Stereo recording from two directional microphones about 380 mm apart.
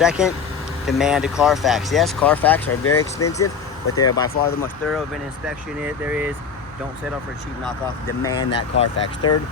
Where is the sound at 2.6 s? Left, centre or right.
Left.